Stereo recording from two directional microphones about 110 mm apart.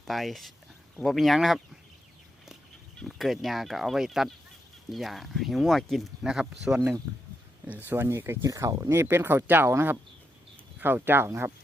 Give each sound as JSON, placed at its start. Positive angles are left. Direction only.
{"t": 0.0, "sound": "speech", "side_deg": 0}
{"t": 3.0, "sound": "speech", "side_deg": 0}
{"t": 7.7, "sound": "speech", "side_deg": -20}